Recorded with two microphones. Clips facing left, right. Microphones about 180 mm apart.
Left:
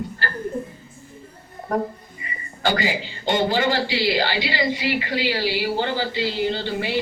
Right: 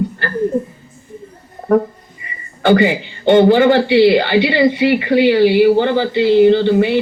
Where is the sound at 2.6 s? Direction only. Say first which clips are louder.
Right 11 dB; 60° right (ahead or behind).